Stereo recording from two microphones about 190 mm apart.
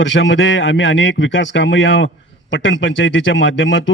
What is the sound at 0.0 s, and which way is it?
A man's voice, 75° left (ahead or behind).